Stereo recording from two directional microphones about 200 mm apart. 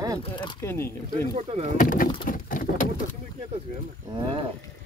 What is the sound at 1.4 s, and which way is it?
Speech, 30° right (ahead or behind).